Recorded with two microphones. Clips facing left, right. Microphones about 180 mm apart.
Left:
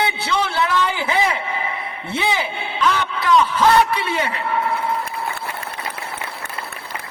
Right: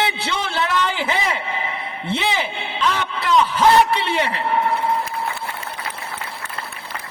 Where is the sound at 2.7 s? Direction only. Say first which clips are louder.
Left 2 dB; 30° right (ahead or behind).